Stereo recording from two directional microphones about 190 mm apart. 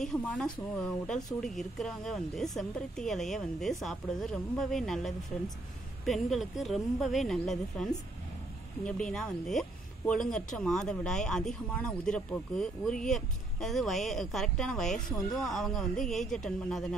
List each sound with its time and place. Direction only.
0.0 s speech: 5° left (ahead or behind)
9.1 s speech: centre (ahead or behind)